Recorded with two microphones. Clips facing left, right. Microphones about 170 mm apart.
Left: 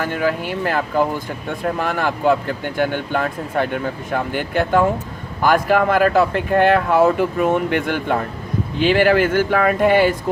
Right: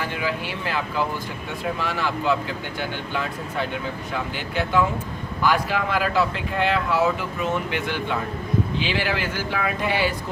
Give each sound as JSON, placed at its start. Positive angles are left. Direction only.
{"t": 0.0, "sound": "speech", "side_deg": 50}